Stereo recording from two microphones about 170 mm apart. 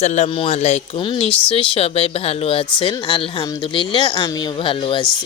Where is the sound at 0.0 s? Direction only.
40° left (ahead or behind).